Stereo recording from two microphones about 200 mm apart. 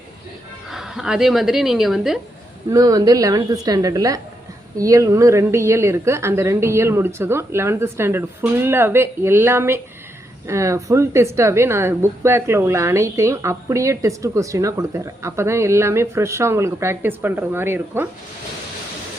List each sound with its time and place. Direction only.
0.7 s speech: centre (ahead or behind)
2.6 s a woman's voice: 15° right (ahead or behind)